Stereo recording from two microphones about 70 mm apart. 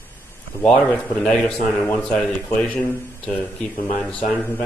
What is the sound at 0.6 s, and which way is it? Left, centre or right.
Speech, centre.